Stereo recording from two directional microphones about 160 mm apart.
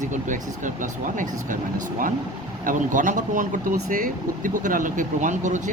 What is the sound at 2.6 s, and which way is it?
Speech, 50° right (ahead or behind).